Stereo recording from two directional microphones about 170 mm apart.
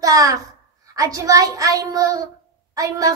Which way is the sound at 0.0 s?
20° right (ahead or behind).